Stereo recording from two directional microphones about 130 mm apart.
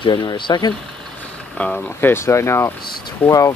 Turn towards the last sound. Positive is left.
turn(degrees=25)  # may be behind; listen again after turning